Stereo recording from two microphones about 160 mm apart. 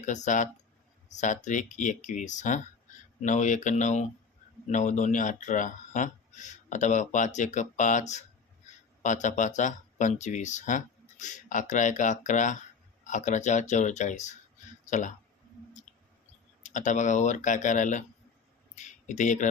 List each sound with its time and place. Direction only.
0.0 s speech: 50° left (ahead or behind)
16.6 s speech: 50° left (ahead or behind)